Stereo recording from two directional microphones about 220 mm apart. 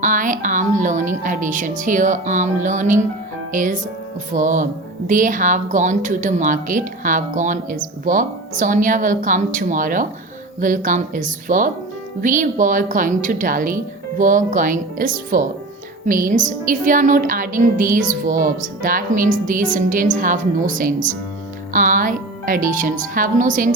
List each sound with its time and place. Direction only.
0.0 s speech: 35° right (ahead or behind)